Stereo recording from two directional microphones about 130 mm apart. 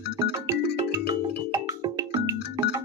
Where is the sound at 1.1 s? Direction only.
30° right (ahead or behind).